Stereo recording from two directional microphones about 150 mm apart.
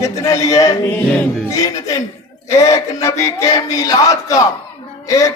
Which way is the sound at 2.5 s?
20° left (ahead or behind).